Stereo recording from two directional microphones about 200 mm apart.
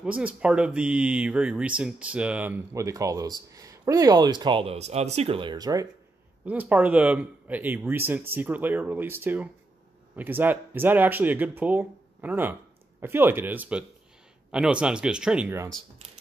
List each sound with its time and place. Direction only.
0.0 s speech: 5° right (ahead or behind)
6.4 s speech: 10° right (ahead or behind)